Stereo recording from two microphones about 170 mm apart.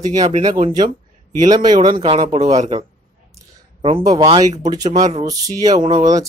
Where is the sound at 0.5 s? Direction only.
30° right (ahead or behind).